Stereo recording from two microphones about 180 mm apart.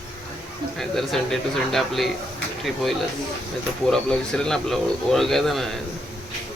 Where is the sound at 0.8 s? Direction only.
Centre (ahead or behind).